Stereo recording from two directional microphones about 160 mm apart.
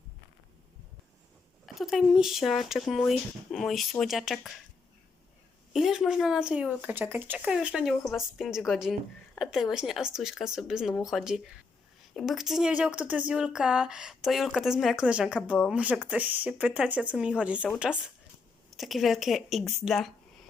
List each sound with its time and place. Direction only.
1.6 s speech: centre (ahead or behind)
5.7 s speech: centre (ahead or behind)